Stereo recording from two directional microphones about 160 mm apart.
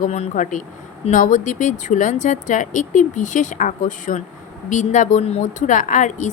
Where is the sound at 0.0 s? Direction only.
50° left (ahead or behind).